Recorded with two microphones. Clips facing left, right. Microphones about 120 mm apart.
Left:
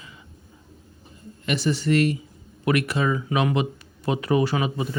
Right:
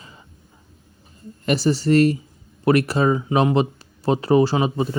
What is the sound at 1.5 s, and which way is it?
Speech, 35° right (ahead or behind).